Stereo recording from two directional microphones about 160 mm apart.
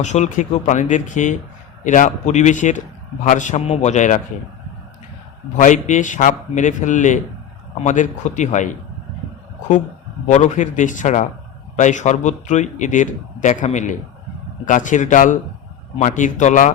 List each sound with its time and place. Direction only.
0.0 s speech: 50° left (ahead or behind)
5.5 s speech: 50° left (ahead or behind)
10.2 s speech: 50° left (ahead or behind)